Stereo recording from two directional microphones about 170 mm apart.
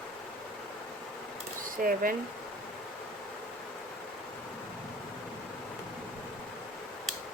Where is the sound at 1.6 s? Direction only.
55° right (ahead or behind).